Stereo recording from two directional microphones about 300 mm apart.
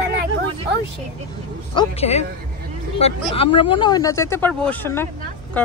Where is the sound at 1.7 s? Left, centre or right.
Centre.